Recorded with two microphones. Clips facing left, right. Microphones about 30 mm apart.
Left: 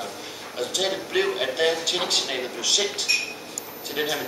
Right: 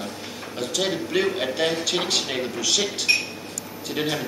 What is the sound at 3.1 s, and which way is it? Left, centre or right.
Speech, right.